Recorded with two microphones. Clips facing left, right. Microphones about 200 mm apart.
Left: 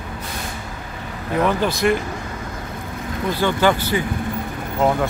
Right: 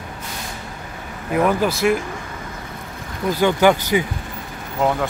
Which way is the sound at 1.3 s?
5° right (ahead or behind).